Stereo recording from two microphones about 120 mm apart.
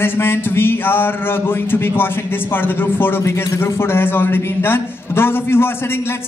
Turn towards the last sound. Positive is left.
turn(degrees=20)  # may be behind; listen again after turning